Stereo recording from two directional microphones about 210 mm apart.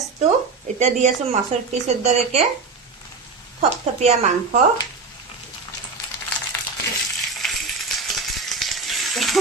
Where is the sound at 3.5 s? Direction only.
30° right (ahead or behind).